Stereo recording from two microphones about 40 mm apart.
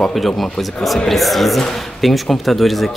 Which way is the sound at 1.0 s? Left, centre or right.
Centre.